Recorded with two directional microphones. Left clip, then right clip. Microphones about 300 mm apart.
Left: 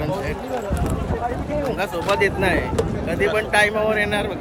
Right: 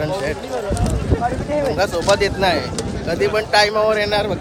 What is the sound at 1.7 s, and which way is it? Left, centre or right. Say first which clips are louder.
A man's voice: right 5 dB; right.